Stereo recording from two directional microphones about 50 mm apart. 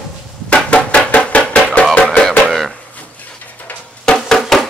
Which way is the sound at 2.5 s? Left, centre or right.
Centre.